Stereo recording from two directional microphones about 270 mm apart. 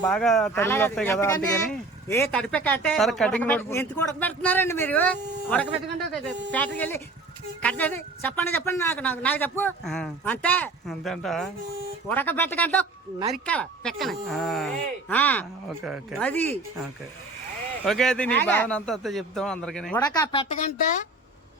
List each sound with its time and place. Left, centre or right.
0.0 s a man's voice: centre
17.8 s speech: centre
20.0 s speech: centre